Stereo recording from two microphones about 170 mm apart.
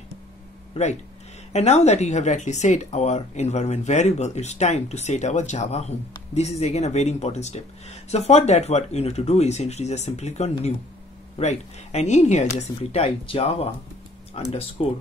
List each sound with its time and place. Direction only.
1.5 s speech: 40° left (ahead or behind)